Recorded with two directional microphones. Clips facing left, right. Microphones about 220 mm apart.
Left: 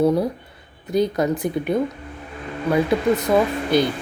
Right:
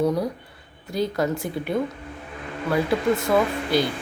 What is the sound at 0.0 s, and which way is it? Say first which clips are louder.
A woman's voice: left 4 dB; 25° left (ahead or behind).